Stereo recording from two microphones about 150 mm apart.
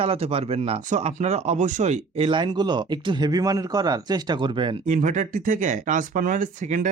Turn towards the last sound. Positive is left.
turn(degrees=-55)  # may be behind; listen again after turning